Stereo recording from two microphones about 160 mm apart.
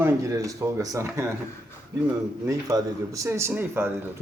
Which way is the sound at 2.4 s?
20° right (ahead or behind).